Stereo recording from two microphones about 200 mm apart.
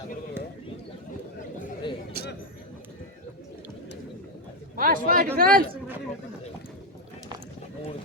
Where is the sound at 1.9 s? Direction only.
25° left (ahead or behind).